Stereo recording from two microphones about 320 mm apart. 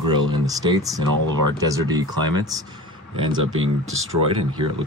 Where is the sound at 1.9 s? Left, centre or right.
Centre.